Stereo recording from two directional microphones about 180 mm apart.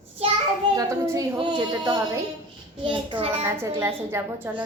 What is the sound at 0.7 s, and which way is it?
A woman's voice, 20° right (ahead or behind).